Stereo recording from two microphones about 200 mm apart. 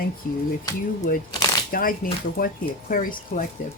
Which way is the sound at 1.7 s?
45° left (ahead or behind).